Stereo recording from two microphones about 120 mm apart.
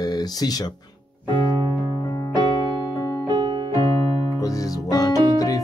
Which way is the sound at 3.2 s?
40° right (ahead or behind).